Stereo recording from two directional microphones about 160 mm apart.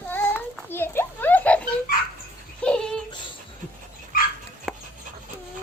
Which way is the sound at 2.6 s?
5° left (ahead or behind).